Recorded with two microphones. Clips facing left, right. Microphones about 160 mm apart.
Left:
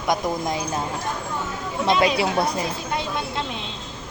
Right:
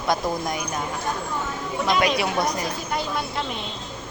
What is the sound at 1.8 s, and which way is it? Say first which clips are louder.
Speech: left 2 dB; 25° left (ahead or behind).